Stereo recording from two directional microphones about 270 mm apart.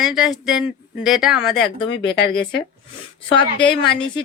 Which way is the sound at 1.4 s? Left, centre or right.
Left.